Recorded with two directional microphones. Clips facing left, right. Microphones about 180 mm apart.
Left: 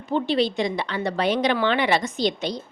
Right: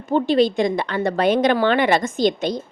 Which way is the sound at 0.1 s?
45° right (ahead or behind).